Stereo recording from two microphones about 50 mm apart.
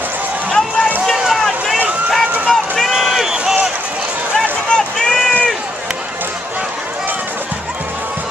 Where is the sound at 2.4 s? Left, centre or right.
Centre.